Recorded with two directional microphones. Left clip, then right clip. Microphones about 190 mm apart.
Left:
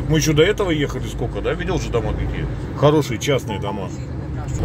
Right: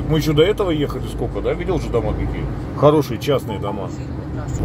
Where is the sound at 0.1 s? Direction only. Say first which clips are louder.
Even; 5° left (ahead or behind).